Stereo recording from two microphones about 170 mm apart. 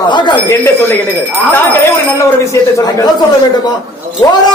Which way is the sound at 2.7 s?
20° left (ahead or behind).